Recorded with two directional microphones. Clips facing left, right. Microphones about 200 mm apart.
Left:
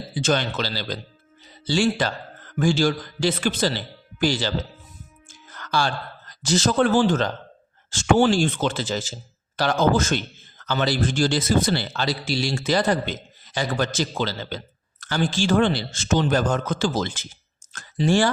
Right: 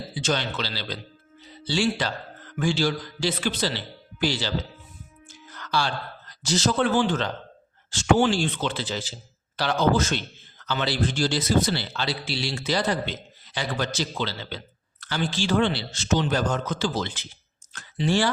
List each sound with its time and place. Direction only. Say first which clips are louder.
0.2 s a man's voice: left 4 dB; 50° left (ahead or behind)